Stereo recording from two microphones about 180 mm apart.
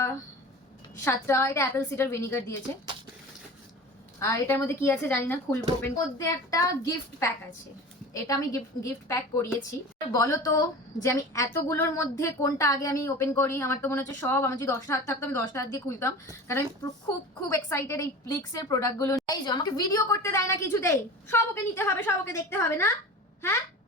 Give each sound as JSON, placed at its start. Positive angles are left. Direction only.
{"t": 1.0, "sound": "a woman's voice", "side_deg": 15}
{"t": 4.2, "sound": "a woman's voice", "side_deg": 15}